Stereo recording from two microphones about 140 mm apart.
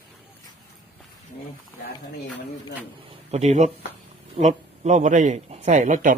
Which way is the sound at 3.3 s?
50° right (ahead or behind).